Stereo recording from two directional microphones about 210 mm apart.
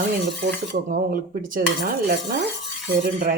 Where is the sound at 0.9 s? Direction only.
40° right (ahead or behind).